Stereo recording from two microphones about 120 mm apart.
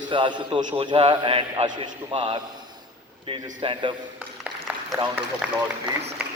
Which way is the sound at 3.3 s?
45° right (ahead or behind).